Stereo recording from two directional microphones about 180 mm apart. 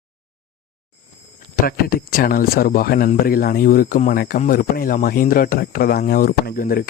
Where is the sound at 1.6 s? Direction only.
55° left (ahead or behind).